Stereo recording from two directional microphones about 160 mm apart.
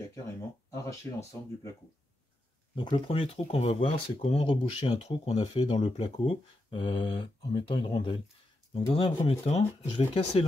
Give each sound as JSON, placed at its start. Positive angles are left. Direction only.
{"t": 0.7, "sound": "speech", "side_deg": 20}
{"t": 2.7, "sound": "speech", "side_deg": 30}